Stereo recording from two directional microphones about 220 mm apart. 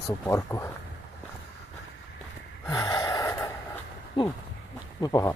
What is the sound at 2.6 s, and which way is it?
Gasp, 15° left (ahead or behind).